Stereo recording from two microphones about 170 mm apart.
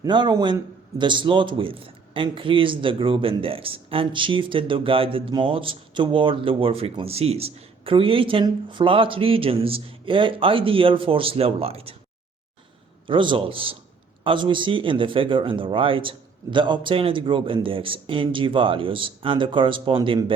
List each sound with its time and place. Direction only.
0.0 s a man's voice: 25° right (ahead or behind)
13.1 s a man's voice: 30° right (ahead or behind)